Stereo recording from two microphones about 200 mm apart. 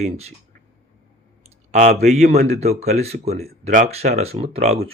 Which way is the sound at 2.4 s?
35° right (ahead or behind).